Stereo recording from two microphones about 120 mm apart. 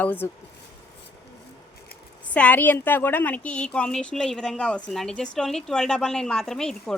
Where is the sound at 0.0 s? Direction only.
15° left (ahead or behind).